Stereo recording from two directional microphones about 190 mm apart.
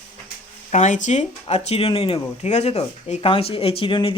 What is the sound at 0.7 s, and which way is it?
Speech, 40° left (ahead or behind).